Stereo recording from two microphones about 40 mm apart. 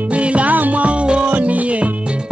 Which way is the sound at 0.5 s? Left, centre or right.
Right.